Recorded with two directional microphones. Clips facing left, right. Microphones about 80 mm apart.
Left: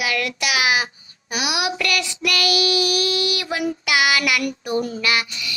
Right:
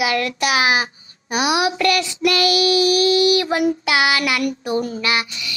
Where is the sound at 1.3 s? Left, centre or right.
Right.